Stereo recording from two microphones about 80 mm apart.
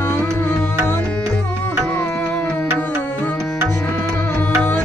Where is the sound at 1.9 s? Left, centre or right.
Left.